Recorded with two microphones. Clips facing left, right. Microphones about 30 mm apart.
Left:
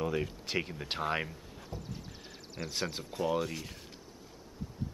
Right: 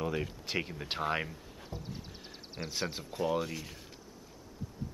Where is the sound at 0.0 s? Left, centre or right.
Centre.